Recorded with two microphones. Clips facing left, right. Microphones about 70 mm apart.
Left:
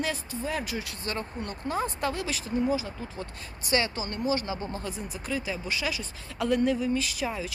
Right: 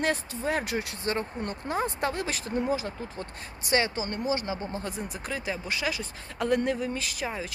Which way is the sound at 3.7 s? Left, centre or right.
Right.